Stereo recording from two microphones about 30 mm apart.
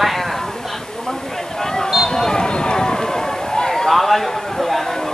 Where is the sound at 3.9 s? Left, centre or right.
Centre.